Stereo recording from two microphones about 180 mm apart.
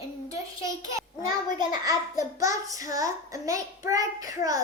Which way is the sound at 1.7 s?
20° right (ahead or behind).